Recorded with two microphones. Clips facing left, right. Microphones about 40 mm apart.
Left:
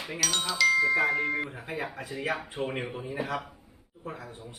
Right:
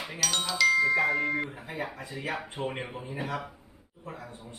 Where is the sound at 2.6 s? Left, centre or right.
Centre.